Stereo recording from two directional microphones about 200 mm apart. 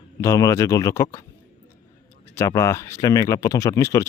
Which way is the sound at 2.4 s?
15° left (ahead or behind).